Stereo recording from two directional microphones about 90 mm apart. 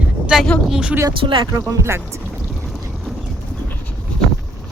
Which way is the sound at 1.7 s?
30° right (ahead or behind).